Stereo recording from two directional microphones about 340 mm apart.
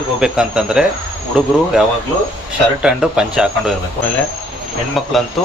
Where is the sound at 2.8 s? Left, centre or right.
Centre.